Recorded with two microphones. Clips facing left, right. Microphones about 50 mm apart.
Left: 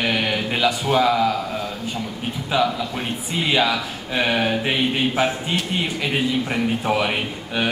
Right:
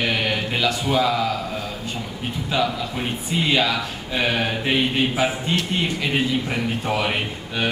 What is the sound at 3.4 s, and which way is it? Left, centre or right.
Speech, centre.